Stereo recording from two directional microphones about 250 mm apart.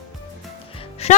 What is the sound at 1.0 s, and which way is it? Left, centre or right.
Music, left.